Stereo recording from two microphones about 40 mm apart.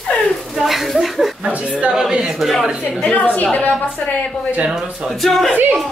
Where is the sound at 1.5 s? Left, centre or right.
Right.